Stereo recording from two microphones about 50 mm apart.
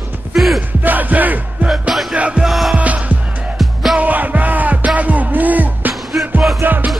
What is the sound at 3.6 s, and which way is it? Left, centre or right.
Music, centre.